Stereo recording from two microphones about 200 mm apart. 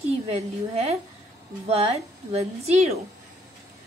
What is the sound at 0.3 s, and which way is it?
A woman's voice, 35° right (ahead or behind).